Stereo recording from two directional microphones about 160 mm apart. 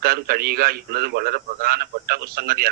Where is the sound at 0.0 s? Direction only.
70° right (ahead or behind).